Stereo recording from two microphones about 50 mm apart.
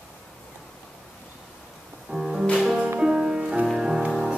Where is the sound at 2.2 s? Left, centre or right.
Centre.